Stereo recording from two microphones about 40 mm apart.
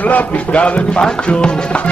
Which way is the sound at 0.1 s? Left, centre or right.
Left.